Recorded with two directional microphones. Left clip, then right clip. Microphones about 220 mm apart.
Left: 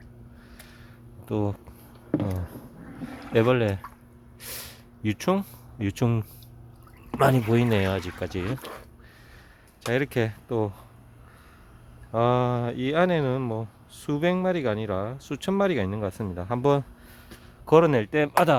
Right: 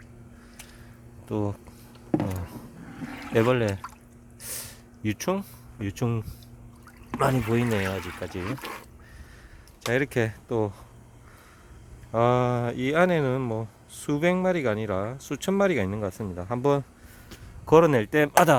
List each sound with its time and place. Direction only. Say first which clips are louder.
1.3 s speech: left 1 dB; 10° left (ahead or behind)
2.0 s a sound: right 1 dB; 15° left (ahead or behind)
3.3 s speech: left 1 dB; 5° left (ahead or behind)
4.4 s a sound: even; 10° left (ahead or behind)
7.1 s speech: left 3 dB; 15° left (ahead or behind)
8.4 s speech: even; 10° right (ahead or behind)
9.9 s speech: even; 5° left (ahead or behind)
12.1 s speech: right 1 dB; centre (ahead or behind)